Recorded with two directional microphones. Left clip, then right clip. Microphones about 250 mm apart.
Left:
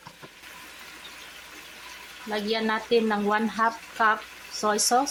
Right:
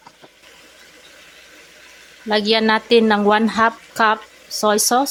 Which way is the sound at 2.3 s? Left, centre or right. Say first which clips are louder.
Right 11 dB; right.